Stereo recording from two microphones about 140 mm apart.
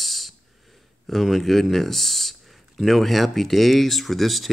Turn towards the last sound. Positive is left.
turn(degrees=0)  # may be behind; listen again after turning